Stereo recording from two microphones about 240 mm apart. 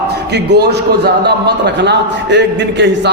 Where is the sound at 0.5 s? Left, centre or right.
Right.